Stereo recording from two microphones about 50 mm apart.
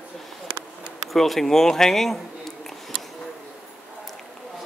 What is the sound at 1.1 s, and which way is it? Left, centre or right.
Speech, centre.